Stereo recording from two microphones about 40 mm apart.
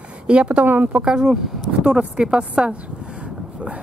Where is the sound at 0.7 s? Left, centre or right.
Right.